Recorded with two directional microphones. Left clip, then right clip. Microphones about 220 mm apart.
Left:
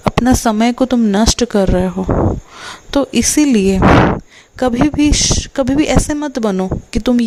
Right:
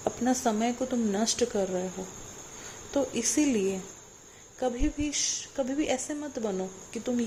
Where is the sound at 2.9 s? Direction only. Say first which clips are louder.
Left 14 dB; 45° left (ahead or behind).